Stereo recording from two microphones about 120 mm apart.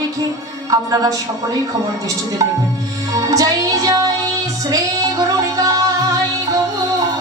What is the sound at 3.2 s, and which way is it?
Music, 30° right (ahead or behind).